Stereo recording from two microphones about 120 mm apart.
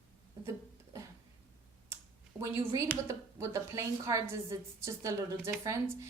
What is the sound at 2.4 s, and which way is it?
A woman's voice, 20° right (ahead or behind).